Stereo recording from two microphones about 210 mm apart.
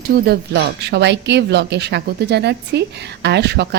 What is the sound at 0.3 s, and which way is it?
A woman's voice, 55° right (ahead or behind).